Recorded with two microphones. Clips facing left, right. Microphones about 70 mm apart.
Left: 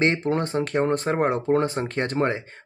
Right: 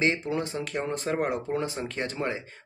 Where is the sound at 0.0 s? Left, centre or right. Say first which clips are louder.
Left 5 dB; left.